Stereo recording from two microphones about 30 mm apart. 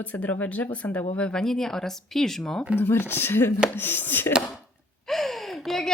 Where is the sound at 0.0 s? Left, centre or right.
Left.